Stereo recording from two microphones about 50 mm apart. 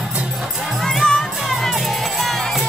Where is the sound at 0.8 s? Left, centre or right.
Centre.